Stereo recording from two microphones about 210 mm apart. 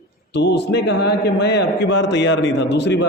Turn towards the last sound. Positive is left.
turn(degrees=55)  # may be behind; listen again after turning